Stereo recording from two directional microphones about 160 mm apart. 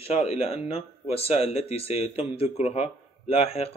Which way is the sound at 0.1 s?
40° left (ahead or behind).